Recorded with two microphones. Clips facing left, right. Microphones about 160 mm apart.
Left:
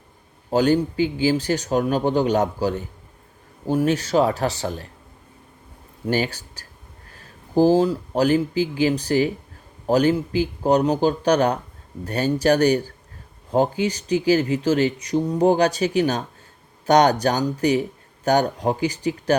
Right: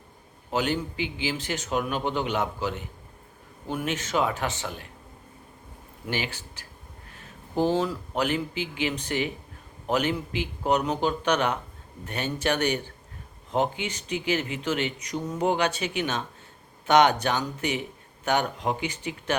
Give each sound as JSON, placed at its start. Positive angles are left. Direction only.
{"t": 0.5, "sound": "speech", "side_deg": 35}
{"t": 6.1, "sound": "speech", "side_deg": 40}